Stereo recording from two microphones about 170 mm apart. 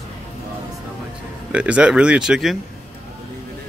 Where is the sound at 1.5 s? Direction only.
5° right (ahead or behind).